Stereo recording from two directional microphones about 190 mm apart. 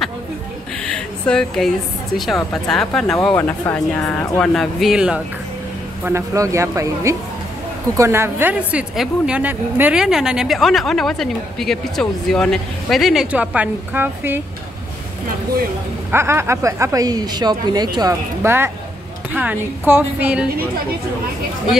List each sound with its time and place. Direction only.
0.9 s a sound: 5° left (ahead or behind)
2.1 s a woman's voice: centre (ahead or behind)
6.0 s a woman's voice: 15° right (ahead or behind)
16.1 s speech: 15° right (ahead or behind)
19.9 s speech: 10° right (ahead or behind)